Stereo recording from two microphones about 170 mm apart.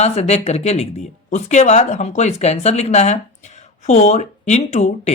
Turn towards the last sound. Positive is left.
turn(degrees=40)  # may be behind; listen again after turning